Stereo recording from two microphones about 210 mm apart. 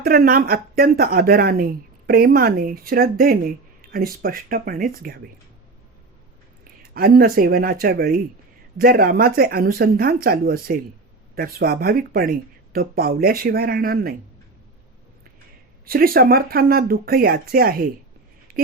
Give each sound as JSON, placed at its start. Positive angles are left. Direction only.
{"t": 0.0, "sound": "speech", "side_deg": -45}
{"t": 6.9, "sound": "speech", "side_deg": -45}
{"t": 15.9, "sound": "speech", "side_deg": -45}